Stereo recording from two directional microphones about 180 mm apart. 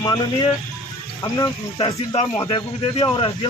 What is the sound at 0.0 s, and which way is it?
Speech, 25° left (ahead or behind).